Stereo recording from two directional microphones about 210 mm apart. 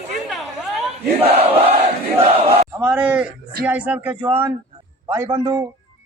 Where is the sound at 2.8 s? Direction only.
5° right (ahead or behind).